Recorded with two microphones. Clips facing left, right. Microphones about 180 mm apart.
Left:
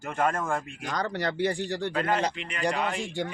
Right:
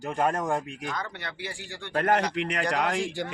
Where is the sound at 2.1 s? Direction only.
70° right (ahead or behind); by 3.1 s 90° right.